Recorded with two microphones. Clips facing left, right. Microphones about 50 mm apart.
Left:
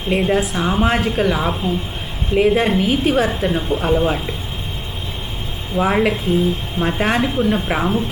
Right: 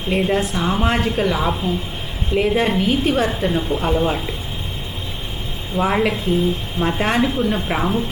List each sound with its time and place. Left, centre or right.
0.1 s a woman's voice: centre
5.7 s a woman's voice: centre